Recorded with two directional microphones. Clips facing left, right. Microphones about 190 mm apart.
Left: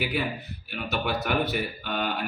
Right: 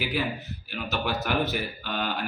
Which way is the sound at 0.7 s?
Centre (ahead or behind).